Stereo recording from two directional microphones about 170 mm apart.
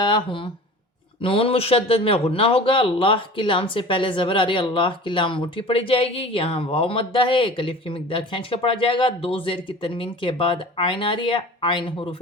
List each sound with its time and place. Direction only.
0.0 s a man's voice: 30° left (ahead or behind)